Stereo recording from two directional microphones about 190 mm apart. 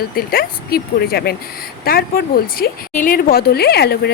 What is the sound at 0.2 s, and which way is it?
Speech, 50° left (ahead or behind).